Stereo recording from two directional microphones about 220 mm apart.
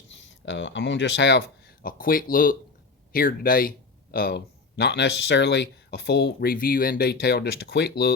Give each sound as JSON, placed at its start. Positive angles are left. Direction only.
{"t": 0.1, "sound": "speech", "side_deg": 55}